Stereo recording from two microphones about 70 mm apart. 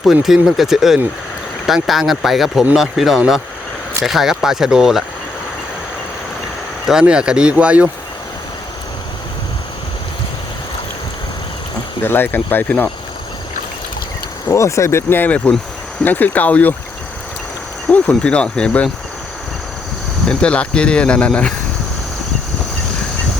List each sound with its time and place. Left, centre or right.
0.0 s speech: centre
7.0 s speech: centre
12.0 s speech: left
14.5 s speech: left
15.2 s speech: left
17.9 s speech: centre
20.2 s speech: centre